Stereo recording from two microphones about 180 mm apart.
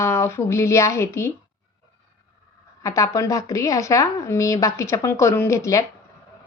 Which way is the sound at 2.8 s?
15° left (ahead or behind).